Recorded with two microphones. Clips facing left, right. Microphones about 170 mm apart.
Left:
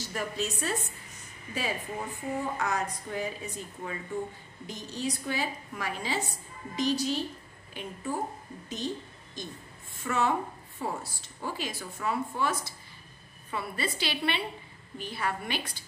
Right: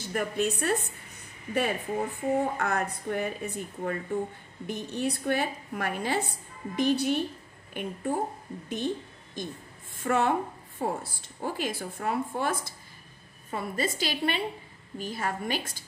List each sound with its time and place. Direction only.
0.0 s a woman's voice: 55° right (ahead or behind)